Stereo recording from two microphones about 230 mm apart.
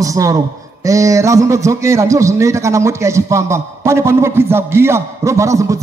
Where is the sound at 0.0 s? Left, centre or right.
Centre.